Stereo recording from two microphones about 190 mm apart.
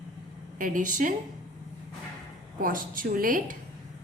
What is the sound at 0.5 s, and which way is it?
Speech, 45° right (ahead or behind).